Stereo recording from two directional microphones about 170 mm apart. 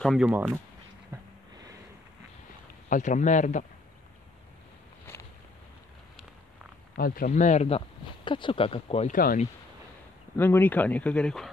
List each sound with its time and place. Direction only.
0.0 s speech: centre (ahead or behind)
1.1 s a sound: 15° right (ahead or behind)
2.9 s speech: 45° left (ahead or behind)
7.0 s speech: 60° left (ahead or behind); by 7.8 s 40° left (ahead or behind)
8.3 s speech: 30° left (ahead or behind)
9.1 s speech: 55° left (ahead or behind)
10.3 s speech: 10° left (ahead or behind)